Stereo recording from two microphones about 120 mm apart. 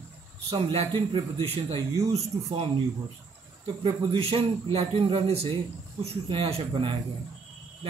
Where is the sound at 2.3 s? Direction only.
30° right (ahead or behind).